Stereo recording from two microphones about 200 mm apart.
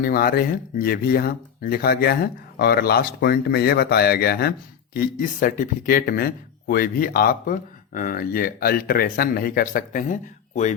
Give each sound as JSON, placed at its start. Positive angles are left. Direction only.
{"t": 0.0, "sound": "speech", "side_deg": 50}
{"t": 4.9, "sound": "speech", "side_deg": 40}